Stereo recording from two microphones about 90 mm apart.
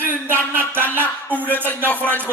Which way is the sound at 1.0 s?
20° left (ahead or behind).